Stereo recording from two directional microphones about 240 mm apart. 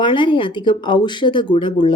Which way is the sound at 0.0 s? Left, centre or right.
Centre.